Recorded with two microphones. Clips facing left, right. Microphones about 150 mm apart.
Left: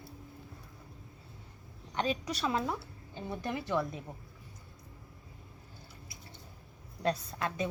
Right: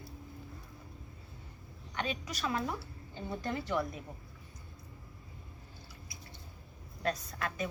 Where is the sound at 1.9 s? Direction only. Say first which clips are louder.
Left 5 dB; 35° left (ahead or behind).